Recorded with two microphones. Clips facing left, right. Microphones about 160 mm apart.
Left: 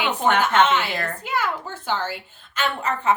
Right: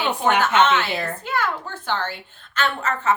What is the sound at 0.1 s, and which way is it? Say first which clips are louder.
Speech: right 1 dB; 10° right (ahead or behind).